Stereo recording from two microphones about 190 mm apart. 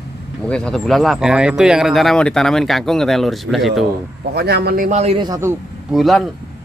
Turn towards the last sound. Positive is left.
turn(degrees=0)  # may be behind; listen again after turning